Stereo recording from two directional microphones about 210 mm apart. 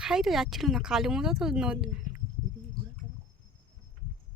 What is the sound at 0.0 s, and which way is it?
Speech, centre (ahead or behind).